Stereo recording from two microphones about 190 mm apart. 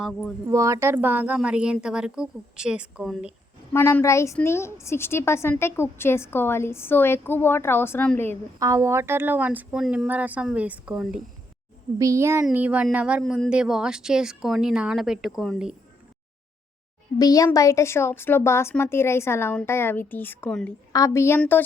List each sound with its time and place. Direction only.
0.0 s speech: centre (ahead or behind)
0.4 s speech: 15° right (ahead or behind)
3.7 s a woman's voice: 10° left (ahead or behind)
8.5 s speech: 15° right (ahead or behind)
11.9 s speech: 15° right (ahead or behind); by 15.7 s centre (ahead or behind)
17.2 s a woman's voice: 20° left (ahead or behind)